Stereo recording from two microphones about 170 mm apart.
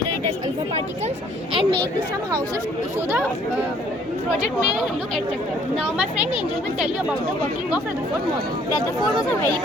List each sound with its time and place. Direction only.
1.5 s speech: 30° right (ahead or behind)